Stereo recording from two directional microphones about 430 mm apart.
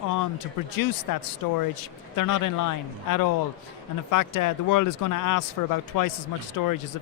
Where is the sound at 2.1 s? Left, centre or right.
Left.